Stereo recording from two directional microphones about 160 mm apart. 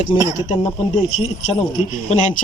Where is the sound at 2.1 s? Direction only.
50° left (ahead or behind).